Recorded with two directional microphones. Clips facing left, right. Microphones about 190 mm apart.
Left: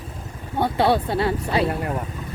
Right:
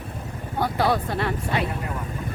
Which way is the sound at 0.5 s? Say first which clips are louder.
Left 3 dB; 25° left (ahead or behind).